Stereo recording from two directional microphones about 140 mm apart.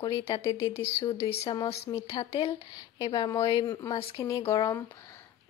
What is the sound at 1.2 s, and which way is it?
A woman's voice, 45° left (ahead or behind).